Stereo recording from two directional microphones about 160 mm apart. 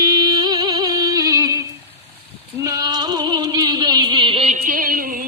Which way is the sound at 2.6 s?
25° right (ahead or behind).